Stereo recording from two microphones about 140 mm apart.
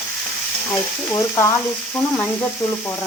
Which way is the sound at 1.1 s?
20° left (ahead or behind).